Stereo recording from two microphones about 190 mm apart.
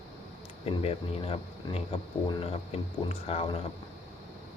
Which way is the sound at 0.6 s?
30° left (ahead or behind).